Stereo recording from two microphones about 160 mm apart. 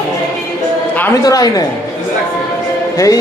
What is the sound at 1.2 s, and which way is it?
Speech, 20° left (ahead or behind).